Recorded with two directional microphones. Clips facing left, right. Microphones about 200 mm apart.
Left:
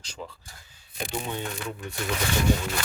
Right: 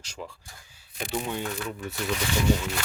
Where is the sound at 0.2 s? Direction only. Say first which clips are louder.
Even; centre (ahead or behind).